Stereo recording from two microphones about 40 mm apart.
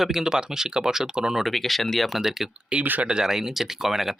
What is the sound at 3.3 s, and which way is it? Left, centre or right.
Speech, centre.